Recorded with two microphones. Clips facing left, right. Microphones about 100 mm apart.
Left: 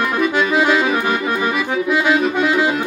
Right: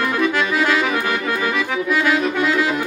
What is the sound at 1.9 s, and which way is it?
Saxophone, 20° left (ahead or behind).